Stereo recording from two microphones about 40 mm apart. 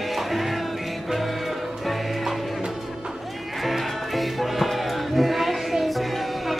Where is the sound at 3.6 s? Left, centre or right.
Centre.